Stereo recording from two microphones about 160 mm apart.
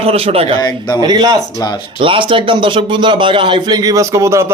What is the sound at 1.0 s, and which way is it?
A man's voice, 25° right (ahead or behind).